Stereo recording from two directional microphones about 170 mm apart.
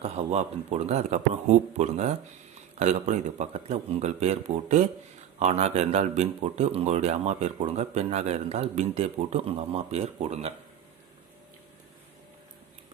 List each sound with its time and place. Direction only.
0.0 s speech: 40° right (ahead or behind)